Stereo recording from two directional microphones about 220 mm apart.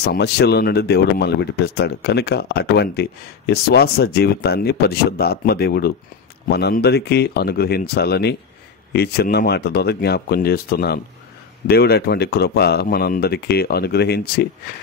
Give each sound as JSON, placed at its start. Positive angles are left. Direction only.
{"t": 0.0, "sound": "speech", "side_deg": 45}